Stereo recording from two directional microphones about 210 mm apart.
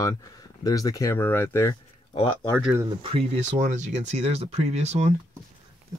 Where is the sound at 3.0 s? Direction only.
25° right (ahead or behind).